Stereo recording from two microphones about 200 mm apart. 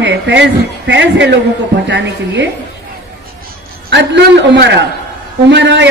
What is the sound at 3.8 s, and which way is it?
A woman's voice, 60° right (ahead or behind).